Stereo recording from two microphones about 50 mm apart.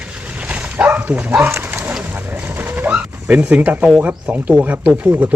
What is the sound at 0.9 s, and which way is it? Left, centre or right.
Speech, right.